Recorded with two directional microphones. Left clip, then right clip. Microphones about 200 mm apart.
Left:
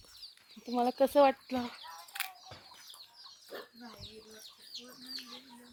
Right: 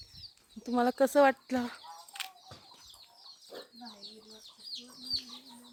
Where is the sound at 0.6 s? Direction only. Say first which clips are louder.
Right 2 dB; 25° right (ahead or behind).